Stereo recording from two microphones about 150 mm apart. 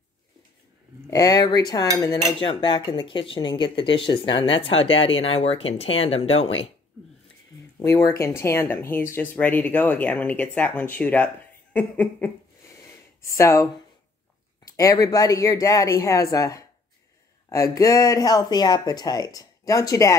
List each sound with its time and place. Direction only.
1.1 s speech: 25° left (ahead or behind)
2.4 s speech: 35° left (ahead or behind)
7.8 s speech: 20° left (ahead or behind)